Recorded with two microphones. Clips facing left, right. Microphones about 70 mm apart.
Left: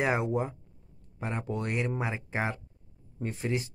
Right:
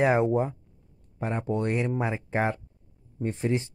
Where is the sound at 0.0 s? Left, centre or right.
Right.